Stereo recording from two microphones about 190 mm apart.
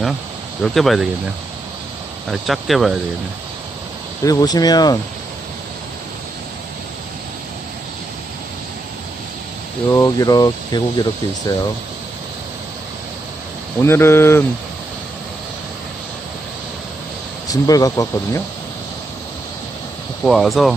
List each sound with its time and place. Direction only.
0.6 s speech: centre (ahead or behind)
2.2 s speech: centre (ahead or behind)
4.2 s speech: 20° left (ahead or behind)
9.8 s speech: 15° left (ahead or behind)
13.8 s speech: 15° left (ahead or behind)
17.5 s speech: 20° left (ahead or behind)
20.2 s speech: centre (ahead or behind)